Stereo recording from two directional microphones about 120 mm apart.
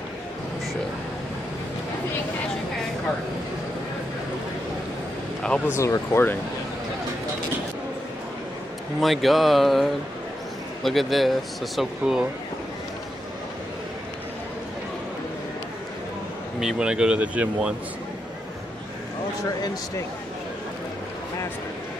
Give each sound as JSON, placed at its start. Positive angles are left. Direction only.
{"t": 5.4, "sound": "speech", "side_deg": 10}
{"t": 5.8, "sound": "speech", "side_deg": 20}
{"t": 9.0, "sound": "speech", "side_deg": 0}
{"t": 16.5, "sound": "speech", "side_deg": -5}